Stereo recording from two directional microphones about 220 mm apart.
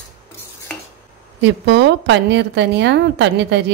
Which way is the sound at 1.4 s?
55° right (ahead or behind).